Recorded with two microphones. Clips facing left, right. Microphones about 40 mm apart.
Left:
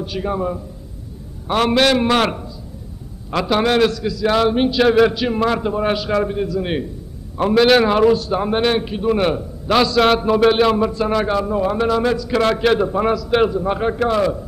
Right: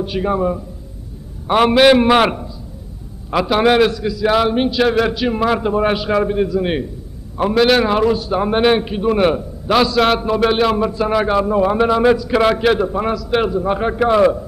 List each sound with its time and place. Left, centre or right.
0.0 s a man's voice: centre